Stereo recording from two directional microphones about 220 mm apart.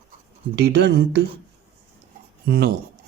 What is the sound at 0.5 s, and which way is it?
Speech, 50° right (ahead or behind).